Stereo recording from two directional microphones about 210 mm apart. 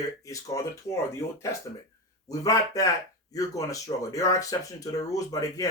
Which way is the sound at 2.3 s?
15° left (ahead or behind).